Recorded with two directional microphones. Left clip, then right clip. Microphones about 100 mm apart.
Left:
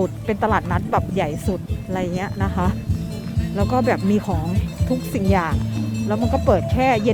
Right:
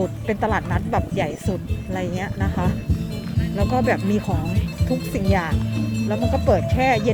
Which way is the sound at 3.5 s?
35° left (ahead or behind).